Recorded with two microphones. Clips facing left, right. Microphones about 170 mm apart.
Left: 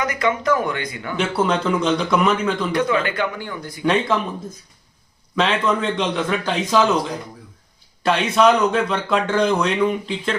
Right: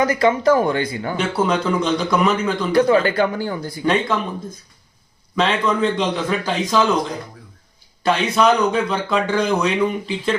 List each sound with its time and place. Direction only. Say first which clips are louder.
0.0 s speech: right 5 dB; 30° right (ahead or behind)
1.1 s speech: left 1 dB; centre (ahead or behind)
2.7 s speech: right 9 dB; 35° right (ahead or behind)
3.8 s speech: even; centre (ahead or behind)
5.4 s speech: right 1 dB; centre (ahead or behind)